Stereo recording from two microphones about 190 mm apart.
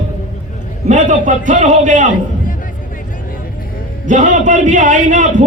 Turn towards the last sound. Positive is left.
turn(degrees=-40)  # may be behind; listen again after turning